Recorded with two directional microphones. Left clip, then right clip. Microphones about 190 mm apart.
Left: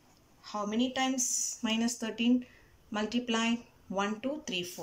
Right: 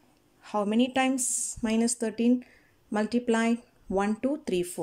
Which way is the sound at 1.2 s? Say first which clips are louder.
Even; 30° right (ahead or behind).